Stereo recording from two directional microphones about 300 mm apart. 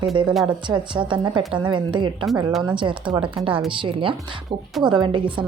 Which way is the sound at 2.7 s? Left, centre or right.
Centre.